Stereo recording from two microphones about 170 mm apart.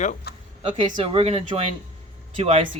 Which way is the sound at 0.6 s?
30° right (ahead or behind).